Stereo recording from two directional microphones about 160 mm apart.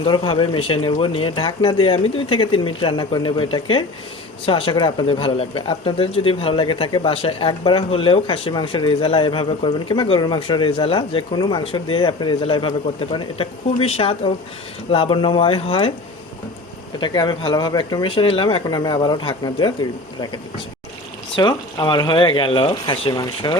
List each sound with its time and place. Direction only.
0.0 s speech: 35° left (ahead or behind)
17.0 s speech: 30° left (ahead or behind)
21.3 s speech: 30° left (ahead or behind)